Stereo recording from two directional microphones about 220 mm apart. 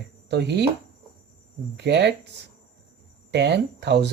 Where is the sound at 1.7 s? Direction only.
50° right (ahead or behind).